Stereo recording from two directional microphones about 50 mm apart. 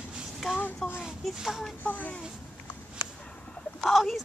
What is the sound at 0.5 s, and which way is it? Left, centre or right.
Speech, left.